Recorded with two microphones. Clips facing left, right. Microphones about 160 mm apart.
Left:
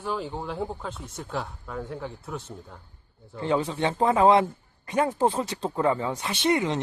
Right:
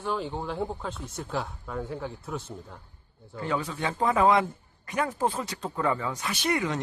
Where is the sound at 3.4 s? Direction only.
25° left (ahead or behind).